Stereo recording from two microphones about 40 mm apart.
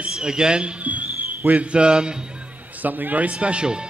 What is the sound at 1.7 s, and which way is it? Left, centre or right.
Speech, right.